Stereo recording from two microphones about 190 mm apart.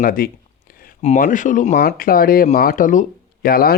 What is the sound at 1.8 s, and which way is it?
Speech, 50° left (ahead or behind).